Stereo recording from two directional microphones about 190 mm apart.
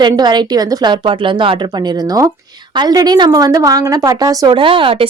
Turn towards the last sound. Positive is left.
turn(degrees=-25)  # may be behind; listen again after turning